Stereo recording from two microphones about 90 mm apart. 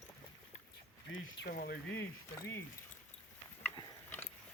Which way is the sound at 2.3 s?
30° left (ahead or behind).